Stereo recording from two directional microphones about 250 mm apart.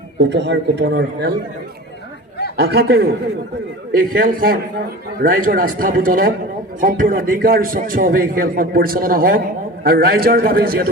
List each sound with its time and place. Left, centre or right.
0.2 s speech: right
2.6 s a man's voice: right